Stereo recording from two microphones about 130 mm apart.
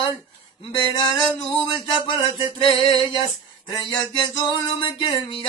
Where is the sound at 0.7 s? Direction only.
35° left (ahead or behind).